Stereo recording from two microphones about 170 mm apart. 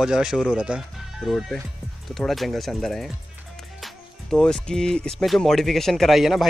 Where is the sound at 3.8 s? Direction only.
5° left (ahead or behind).